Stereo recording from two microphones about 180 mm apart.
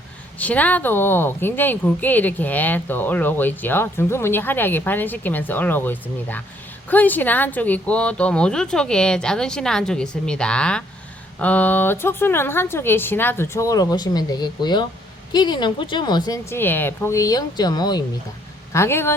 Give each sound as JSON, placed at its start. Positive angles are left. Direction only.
{"t": 0.3, "sound": "a woman's voice", "side_deg": 10}